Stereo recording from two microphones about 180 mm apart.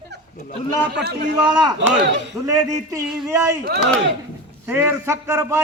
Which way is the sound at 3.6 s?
65° right (ahead or behind).